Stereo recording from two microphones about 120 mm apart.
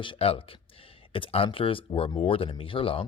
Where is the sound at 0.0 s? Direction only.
50° left (ahead or behind).